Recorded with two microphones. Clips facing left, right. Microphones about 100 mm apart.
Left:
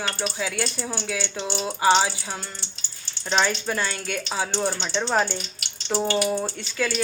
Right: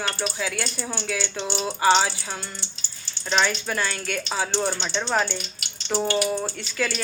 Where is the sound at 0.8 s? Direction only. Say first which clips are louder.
Even; 5° left (ahead or behind).